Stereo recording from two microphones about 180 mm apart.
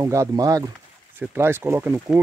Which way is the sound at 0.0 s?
15° right (ahead or behind).